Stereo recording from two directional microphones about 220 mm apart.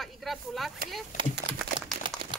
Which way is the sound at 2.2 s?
45° right (ahead or behind).